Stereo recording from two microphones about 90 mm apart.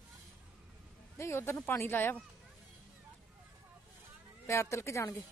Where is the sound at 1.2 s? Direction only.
30° left (ahead or behind).